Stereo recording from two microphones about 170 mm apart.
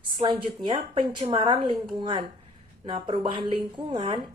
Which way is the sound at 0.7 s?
30° right (ahead or behind).